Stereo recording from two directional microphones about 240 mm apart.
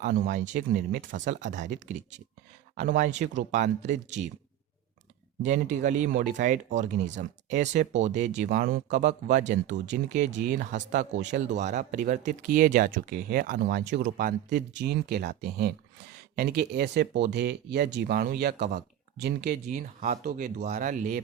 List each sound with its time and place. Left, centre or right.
0.0 s speech: right
1.4 s speech: right
2.7 s speech: right
5.4 s speech: right